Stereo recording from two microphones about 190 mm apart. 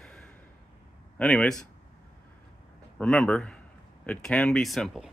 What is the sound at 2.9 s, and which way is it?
Speech, 5° left (ahead or behind).